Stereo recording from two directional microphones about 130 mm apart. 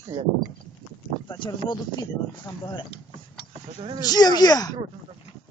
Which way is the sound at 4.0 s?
30° left (ahead or behind).